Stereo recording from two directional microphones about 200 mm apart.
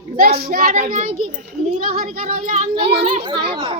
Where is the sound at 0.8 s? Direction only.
30° right (ahead or behind).